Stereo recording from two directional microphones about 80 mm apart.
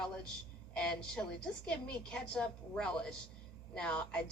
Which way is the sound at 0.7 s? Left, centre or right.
Centre.